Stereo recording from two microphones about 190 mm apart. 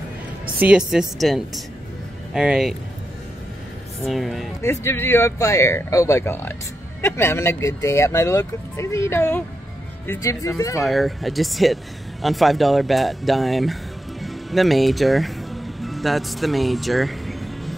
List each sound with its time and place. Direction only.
0.7 s speech: 5° right (ahead or behind)
4.0 s speech: centre (ahead or behind)
4.6 s speech: 10° left (ahead or behind)
10.8 s speech: centre (ahead or behind)
14.2 s music: centre (ahead or behind)